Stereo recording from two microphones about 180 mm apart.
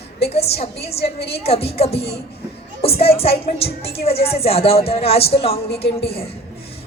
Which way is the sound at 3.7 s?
60° left (ahead or behind).